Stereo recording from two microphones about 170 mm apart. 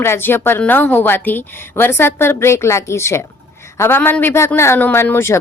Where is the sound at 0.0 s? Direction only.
15° left (ahead or behind).